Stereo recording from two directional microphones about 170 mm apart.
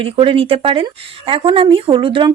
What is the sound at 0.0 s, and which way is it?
Speech, 30° right (ahead or behind).